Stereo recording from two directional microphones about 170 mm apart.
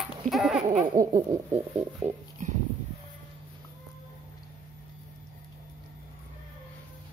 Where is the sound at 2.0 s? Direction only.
45° right (ahead or behind).